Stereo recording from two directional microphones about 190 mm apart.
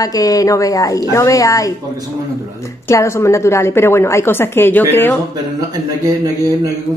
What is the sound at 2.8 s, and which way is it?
A woman's voice, 15° left (ahead or behind).